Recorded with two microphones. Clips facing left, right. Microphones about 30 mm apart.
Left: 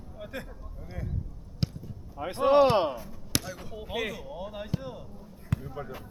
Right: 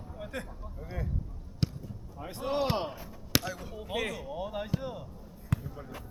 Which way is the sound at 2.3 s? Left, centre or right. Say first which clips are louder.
Left 11 dB; left.